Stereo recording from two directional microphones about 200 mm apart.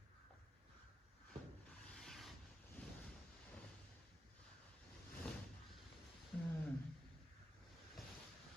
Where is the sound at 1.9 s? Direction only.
Centre (ahead or behind).